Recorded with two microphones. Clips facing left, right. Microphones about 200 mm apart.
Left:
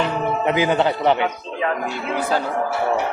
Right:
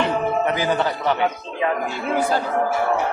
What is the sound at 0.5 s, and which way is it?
Speech, 20° left (ahead or behind).